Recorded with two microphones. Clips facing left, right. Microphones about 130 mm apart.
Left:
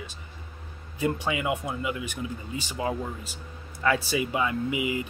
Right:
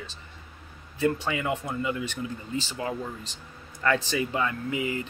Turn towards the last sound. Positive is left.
turn(degrees=15)  # may be behind; listen again after turning